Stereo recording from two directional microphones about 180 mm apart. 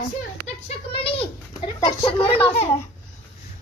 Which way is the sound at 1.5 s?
20° left (ahead or behind).